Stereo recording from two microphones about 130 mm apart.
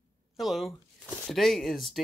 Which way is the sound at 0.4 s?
Centre (ahead or behind).